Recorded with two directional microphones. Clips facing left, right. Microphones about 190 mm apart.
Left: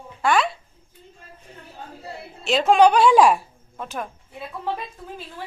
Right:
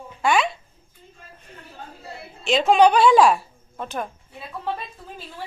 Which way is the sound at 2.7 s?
10° left (ahead or behind).